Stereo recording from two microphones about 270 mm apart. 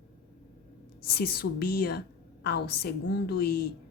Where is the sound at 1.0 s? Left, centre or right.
Left.